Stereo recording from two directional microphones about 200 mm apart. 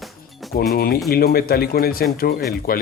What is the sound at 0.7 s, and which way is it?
Speech, 50° left (ahead or behind).